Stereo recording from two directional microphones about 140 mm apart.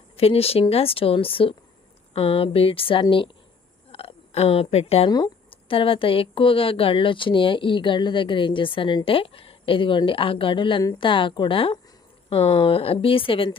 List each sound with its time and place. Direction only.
0.2 s a woman's voice: 45° left (ahead or behind)
5.0 s speech: 30° left (ahead or behind)